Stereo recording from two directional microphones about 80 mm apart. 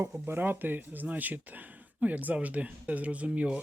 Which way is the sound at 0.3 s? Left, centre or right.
Right.